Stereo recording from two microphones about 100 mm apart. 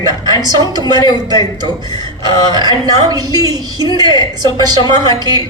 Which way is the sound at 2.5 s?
45° right (ahead or behind).